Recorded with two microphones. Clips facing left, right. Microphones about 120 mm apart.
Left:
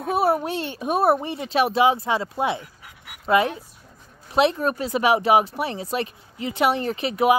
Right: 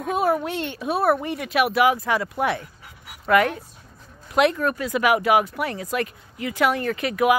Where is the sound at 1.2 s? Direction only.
25° left (ahead or behind).